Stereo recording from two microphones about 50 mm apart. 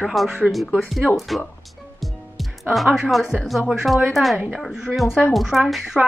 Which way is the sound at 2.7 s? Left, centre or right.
Centre.